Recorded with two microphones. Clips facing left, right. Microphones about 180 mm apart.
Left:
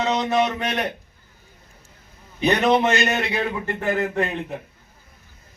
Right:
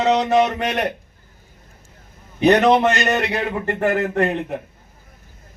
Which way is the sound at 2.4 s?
70° right (ahead or behind).